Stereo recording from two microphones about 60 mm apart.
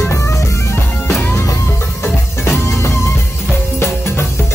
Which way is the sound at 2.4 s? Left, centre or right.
Left.